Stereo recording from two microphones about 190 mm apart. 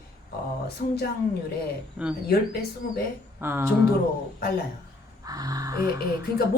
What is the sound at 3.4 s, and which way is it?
Speech, 10° right (ahead or behind).